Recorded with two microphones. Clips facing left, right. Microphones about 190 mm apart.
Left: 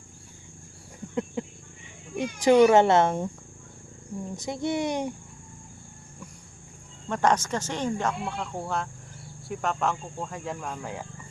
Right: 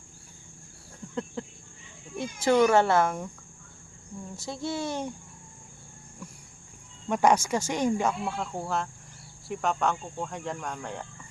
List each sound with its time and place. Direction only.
1.4 s a sound: 20° left (ahead or behind)
2.1 s speech: 15° left (ahead or behind)
4.4 s speech: 20° left (ahead or behind)
7.1 s speech: 10° right (ahead or behind); by 11.0 s 5° left (ahead or behind)